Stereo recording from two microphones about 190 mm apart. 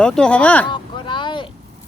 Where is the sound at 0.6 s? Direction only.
25° left (ahead or behind).